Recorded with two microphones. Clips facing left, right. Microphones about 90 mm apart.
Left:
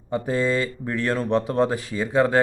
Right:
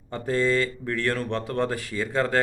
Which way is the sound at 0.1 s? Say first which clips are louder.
Left 1 dB; 15° left (ahead or behind).